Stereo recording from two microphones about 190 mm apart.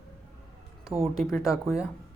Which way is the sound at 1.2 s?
Centre (ahead or behind).